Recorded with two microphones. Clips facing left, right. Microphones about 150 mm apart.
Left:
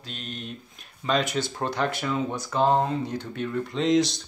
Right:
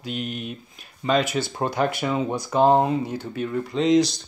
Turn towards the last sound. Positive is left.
turn(degrees=0)  # may be behind; listen again after turning